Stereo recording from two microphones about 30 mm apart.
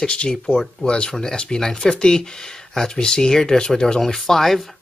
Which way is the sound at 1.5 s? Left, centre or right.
Centre.